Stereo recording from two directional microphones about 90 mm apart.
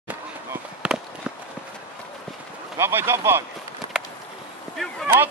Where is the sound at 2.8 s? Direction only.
25° right (ahead or behind).